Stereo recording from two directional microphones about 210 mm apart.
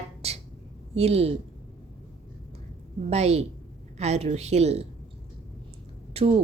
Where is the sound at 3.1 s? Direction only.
30° right (ahead or behind).